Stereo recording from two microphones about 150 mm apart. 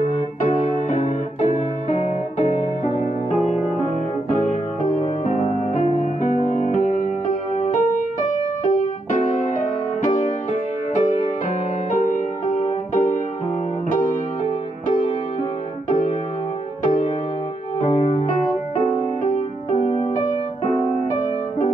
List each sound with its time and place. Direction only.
0.1 s music: 50° left (ahead or behind)
5.0 s music: 60° left (ahead or behind)
10.0 s music: 55° left (ahead or behind)
12.5 s music: 60° left (ahead or behind)
17.7 s music: 45° left (ahead or behind)